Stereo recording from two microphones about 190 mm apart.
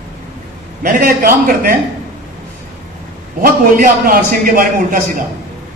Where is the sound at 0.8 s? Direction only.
50° right (ahead or behind).